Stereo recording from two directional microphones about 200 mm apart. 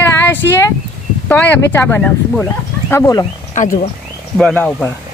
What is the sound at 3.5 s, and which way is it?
Speech, 40° left (ahead or behind).